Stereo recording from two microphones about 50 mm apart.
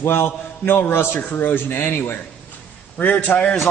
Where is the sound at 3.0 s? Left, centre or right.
Left.